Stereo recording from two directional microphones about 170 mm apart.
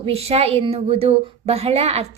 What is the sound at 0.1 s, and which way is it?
A woman's voice, 35° right (ahead or behind).